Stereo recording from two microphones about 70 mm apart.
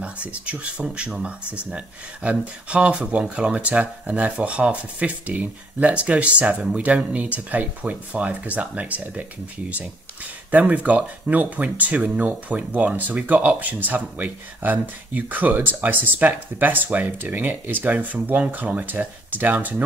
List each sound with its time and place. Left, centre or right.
0.0 s speech: centre
10.5 s speech: right